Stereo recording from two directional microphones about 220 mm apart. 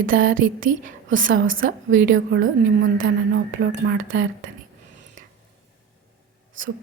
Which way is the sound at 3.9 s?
70° right (ahead or behind).